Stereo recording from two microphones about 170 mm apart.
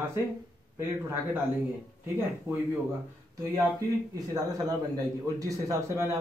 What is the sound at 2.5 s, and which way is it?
Speech, 15° right (ahead or behind).